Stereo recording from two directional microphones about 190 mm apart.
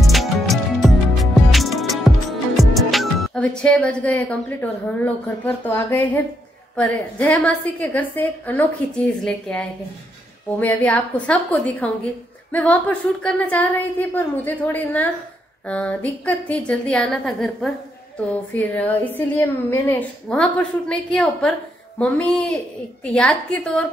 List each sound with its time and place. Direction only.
0.0 s music: centre (ahead or behind)
6.7 s a woman's voice: 5° left (ahead or behind)